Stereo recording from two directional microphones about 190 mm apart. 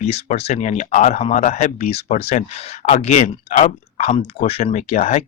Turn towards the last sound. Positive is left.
turn(degrees=35)  # may be behind; listen again after turning